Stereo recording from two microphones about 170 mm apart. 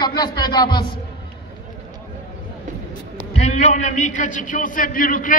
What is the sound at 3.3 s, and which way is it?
A man's voice, 40° left (ahead or behind).